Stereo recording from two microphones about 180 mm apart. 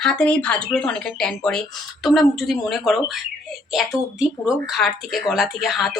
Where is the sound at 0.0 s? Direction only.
5° left (ahead or behind).